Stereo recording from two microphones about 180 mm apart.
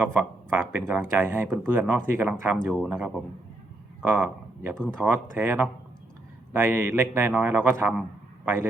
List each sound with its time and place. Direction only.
0.0 s speech: 10° right (ahead or behind)